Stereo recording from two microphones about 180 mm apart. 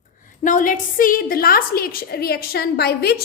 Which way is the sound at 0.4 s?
45° left (ahead or behind).